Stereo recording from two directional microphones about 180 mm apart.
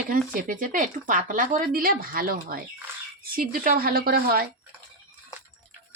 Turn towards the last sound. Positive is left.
turn(degrees=-55)  # may be behind; listen again after turning